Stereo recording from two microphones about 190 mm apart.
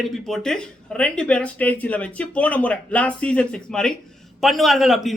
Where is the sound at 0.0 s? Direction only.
5° left (ahead or behind).